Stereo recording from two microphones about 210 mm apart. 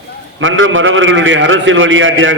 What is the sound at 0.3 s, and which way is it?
A man's voice, 65° right (ahead or behind).